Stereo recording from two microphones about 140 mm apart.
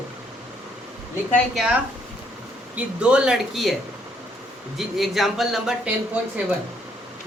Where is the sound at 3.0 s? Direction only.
5° right (ahead or behind).